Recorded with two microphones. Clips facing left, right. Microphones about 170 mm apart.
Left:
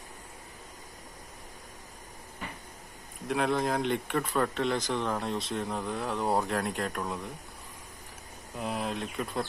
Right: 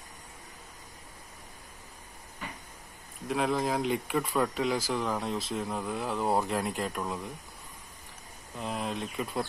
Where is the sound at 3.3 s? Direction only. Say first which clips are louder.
Left 1 dB; centre (ahead or behind).